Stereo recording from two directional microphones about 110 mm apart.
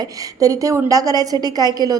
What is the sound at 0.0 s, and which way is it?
A woman's voice, 30° right (ahead or behind).